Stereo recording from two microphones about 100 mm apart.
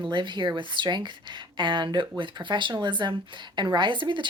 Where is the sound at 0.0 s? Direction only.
50° right (ahead or behind).